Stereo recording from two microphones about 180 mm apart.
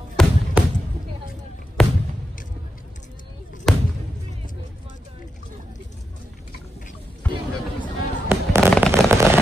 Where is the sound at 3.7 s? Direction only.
Centre (ahead or behind).